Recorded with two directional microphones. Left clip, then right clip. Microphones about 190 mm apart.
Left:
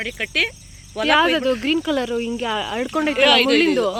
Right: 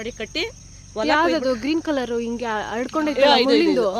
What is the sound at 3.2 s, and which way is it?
Speech, 35° right (ahead or behind).